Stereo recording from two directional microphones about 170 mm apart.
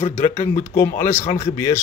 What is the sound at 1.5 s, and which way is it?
Speech, 20° left (ahead or behind).